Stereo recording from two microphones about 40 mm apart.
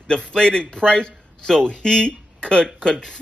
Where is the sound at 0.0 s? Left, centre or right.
Left.